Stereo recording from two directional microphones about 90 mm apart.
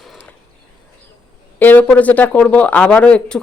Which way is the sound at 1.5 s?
20° left (ahead or behind).